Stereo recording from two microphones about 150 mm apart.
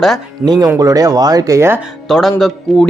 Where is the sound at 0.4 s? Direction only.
25° right (ahead or behind).